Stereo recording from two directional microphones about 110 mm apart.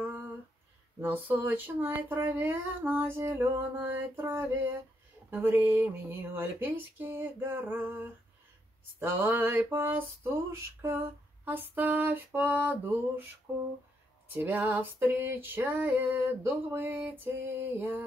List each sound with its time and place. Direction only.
1.0 s speech: 20° right (ahead or behind)
13.5 s a sound: 25° right (ahead or behind)
14.3 s speech: 20° right (ahead or behind)